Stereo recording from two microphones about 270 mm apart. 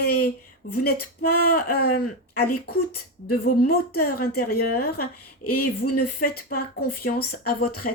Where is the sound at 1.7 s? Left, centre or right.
Left.